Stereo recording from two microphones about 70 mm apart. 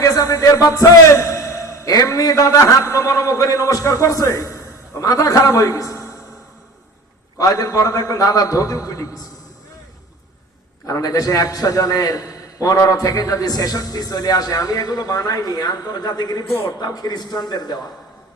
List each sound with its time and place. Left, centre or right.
0.0 s a man's voice: left
7.3 s a man's voice: left
10.8 s a man's voice: left